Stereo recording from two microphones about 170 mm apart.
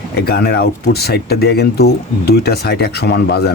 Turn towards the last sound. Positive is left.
turn(degrees=75)  # may be behind; listen again after turning